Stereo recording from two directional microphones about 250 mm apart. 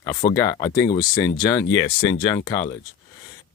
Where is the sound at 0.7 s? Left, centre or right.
Left.